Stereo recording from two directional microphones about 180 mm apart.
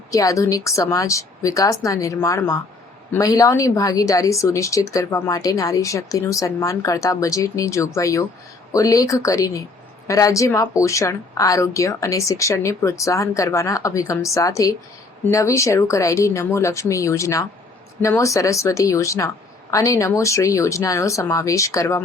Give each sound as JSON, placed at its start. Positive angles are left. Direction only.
{"t": 0.1, "sound": "a woman's voice", "side_deg": 20}